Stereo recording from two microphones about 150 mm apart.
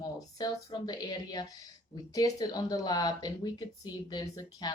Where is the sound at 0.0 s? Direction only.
25° left (ahead or behind).